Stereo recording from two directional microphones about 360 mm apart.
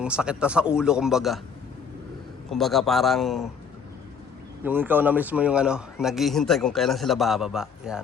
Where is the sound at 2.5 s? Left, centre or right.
Centre.